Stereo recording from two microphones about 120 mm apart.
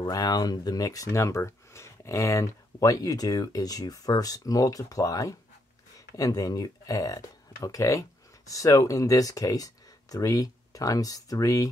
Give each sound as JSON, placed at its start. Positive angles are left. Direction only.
{"t": 0.0, "sound": "speech", "side_deg": 35}